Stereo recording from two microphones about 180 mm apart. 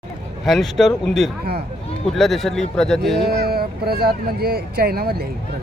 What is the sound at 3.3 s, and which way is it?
Speech, 60° right (ahead or behind).